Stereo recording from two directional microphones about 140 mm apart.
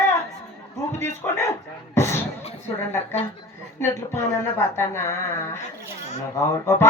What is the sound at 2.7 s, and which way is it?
Speech, 15° left (ahead or behind).